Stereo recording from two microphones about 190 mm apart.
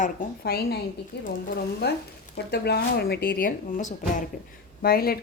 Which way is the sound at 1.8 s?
60° left (ahead or behind).